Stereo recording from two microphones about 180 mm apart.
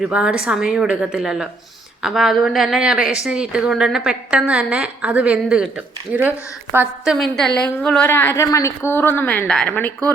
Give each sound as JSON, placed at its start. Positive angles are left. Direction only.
{"t": 0.0, "sound": "a woman's voice", "side_deg": -5}